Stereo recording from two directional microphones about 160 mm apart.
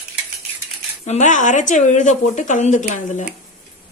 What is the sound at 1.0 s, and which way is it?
Speech, 45° left (ahead or behind).